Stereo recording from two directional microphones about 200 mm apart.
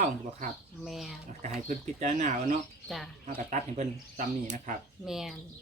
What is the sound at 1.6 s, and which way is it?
Speech, 40° right (ahead or behind).